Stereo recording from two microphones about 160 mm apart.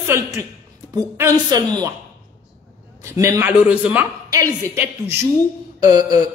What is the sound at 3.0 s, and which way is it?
A woman's voice, 20° right (ahead or behind).